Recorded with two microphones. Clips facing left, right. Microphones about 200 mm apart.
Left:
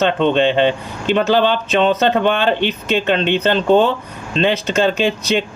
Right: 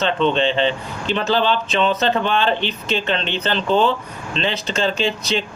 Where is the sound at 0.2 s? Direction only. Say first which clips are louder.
Left 2 dB; 55° left (ahead or behind).